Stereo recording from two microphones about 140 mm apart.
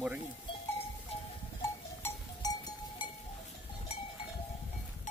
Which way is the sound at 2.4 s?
30° left (ahead or behind).